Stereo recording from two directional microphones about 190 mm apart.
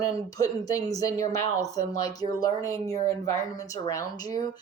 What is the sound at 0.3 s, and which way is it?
Speech, 20° left (ahead or behind).